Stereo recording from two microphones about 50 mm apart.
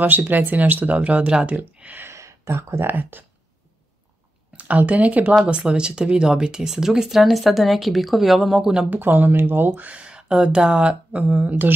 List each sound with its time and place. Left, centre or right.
0.0 s speech: right
2.0 s a sound: right
2.8 s speech: right
4.6 s speech: right; by 8.8 s centre
8.9 s speech: right